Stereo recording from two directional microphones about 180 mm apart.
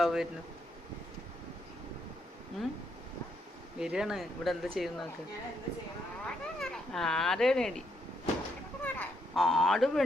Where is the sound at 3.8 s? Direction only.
5° right (ahead or behind).